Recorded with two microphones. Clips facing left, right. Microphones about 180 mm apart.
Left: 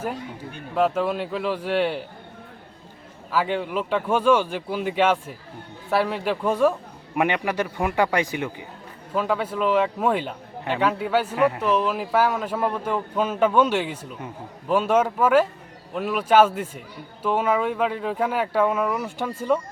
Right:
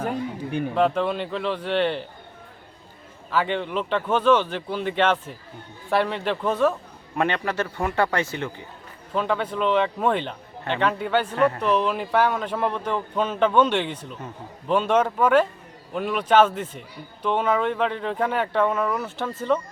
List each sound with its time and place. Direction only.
0.8 s a man's voice: 5° left (ahead or behind)
3.3 s a man's voice: 5° left (ahead or behind)